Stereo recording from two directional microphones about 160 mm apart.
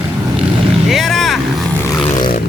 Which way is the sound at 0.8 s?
Centre (ahead or behind).